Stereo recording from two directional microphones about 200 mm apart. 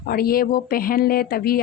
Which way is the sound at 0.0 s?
50° left (ahead or behind).